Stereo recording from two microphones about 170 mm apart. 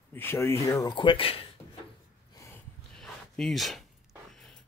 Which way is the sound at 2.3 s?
15° left (ahead or behind).